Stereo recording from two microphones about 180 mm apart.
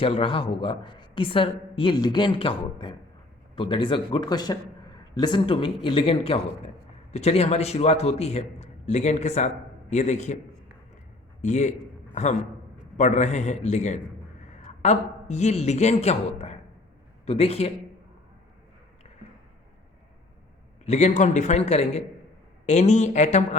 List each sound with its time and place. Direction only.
0.0 s a woman's voice: 30° left (ahead or behind)
11.3 s a man's voice: 40° left (ahead or behind)
20.8 s a man's voice: 40° left (ahead or behind)